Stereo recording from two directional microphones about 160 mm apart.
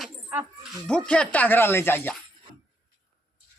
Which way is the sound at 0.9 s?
5° left (ahead or behind).